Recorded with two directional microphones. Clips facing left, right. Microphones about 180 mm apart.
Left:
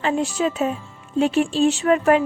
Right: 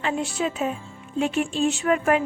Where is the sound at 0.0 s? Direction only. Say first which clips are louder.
Left 4 dB; 40° left (ahead or behind).